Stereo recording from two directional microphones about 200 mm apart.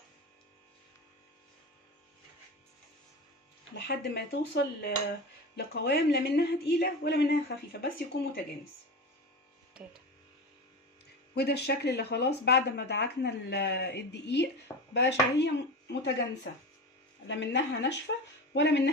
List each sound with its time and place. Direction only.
3.8 s speech: 55° left (ahead or behind)
11.3 s speech: 55° left (ahead or behind)